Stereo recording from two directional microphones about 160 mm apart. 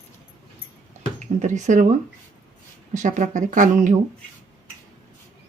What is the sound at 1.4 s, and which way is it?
Speech, 50° right (ahead or behind).